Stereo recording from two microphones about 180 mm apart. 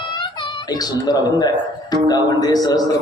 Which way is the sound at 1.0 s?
20° left (ahead or behind).